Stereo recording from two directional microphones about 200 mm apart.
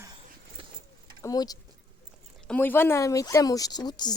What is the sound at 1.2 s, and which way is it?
Speech, 20° left (ahead or behind).